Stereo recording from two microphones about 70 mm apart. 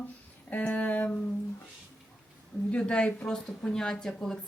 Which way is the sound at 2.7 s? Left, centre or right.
Centre.